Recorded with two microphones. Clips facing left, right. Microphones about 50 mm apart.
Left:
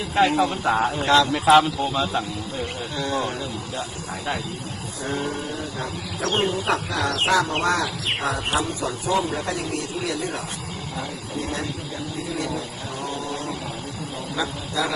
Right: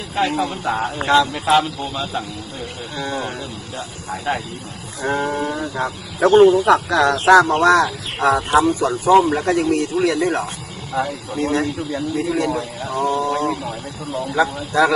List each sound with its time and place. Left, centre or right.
0.2 s a man's voice: centre
1.0 s speech: centre
1.3 s a man's voice: centre
3.1 s speech: centre
3.3 s speech: right
5.0 s speech: right
8.5 s speech: right
12.2 s speech: right
12.9 s a man's voice: right